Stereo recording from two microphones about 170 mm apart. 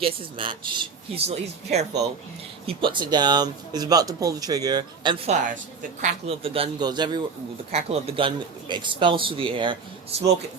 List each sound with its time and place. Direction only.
0.0 s a man's voice: 30° right (ahead or behind)
2.6 s speech: 30° right (ahead or behind)
7.7 s a man's voice: 35° right (ahead or behind)